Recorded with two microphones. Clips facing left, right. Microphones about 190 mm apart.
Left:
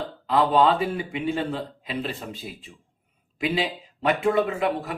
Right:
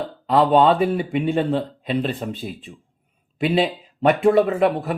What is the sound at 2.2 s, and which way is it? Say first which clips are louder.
Speech: right 8 dB; 50° right (ahead or behind).